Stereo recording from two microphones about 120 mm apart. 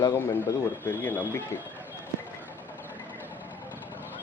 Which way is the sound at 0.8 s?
20° left (ahead or behind).